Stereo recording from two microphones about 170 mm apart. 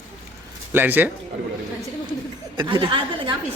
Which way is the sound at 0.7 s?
10° right (ahead or behind).